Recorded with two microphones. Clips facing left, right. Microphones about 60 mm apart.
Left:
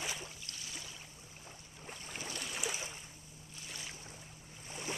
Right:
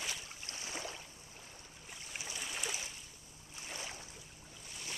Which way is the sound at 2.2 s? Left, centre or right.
Centre.